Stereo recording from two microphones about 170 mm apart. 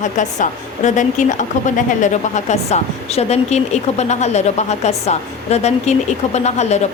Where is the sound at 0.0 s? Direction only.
45° left (ahead or behind).